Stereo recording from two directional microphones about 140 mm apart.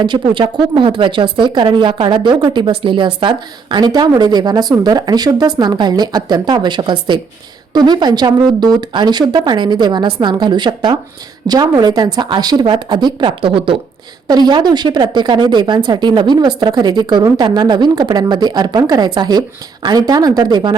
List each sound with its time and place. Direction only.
0.0 s a woman's voice: 35° right (ahead or behind)